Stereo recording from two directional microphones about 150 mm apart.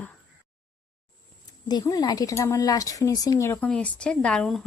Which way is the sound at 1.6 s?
25° left (ahead or behind).